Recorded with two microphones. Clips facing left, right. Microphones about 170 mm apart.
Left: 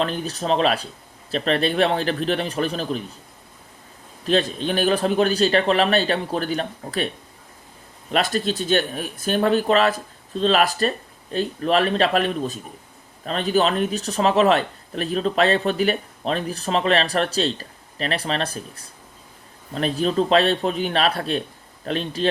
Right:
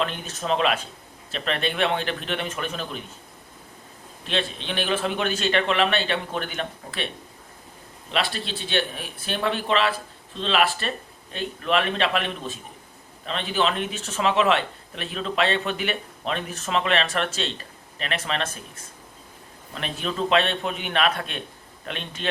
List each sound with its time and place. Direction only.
0.0 s speech: 35° left (ahead or behind)
4.3 s speech: 40° left (ahead or behind)
8.1 s speech: 45° left (ahead or behind)